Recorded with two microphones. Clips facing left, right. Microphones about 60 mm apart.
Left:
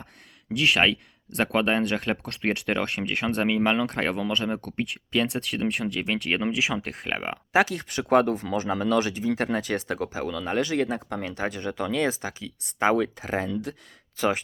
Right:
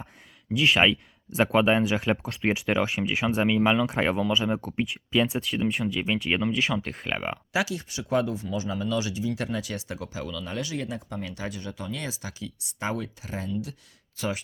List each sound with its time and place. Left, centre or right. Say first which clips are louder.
0.5 s speech: right 1 dB; centre
7.5 s speech: left 7 dB; left